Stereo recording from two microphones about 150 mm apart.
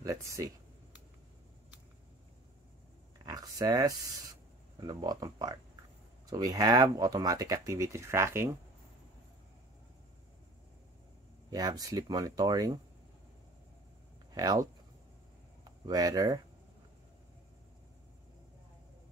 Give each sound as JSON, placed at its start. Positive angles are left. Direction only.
{"t": 0.0, "sound": "speech", "side_deg": -20}
{"t": 3.3, "sound": "a sound", "side_deg": -25}
{"t": 4.7, "sound": "speech", "side_deg": -25}
{"t": 11.5, "sound": "speech", "side_deg": -25}
{"t": 14.3, "sound": "speech", "side_deg": -25}
{"t": 15.8, "sound": "speech", "side_deg": -25}